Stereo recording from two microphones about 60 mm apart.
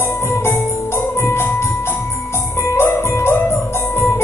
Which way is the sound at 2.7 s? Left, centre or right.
Left.